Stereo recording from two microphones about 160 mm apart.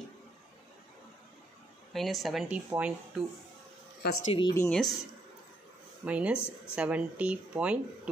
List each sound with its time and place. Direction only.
2.0 s speech: centre (ahead or behind)
4.2 s a woman's voice: 35° left (ahead or behind)
4.6 s speech: centre (ahead or behind)
6.0 s speech: 10° right (ahead or behind)